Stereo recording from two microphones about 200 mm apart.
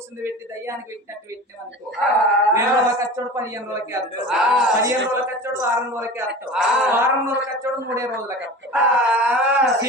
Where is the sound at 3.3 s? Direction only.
15° right (ahead or behind).